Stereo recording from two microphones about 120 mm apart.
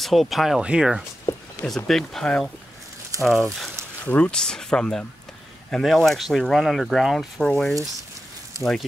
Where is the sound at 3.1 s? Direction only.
25° right (ahead or behind).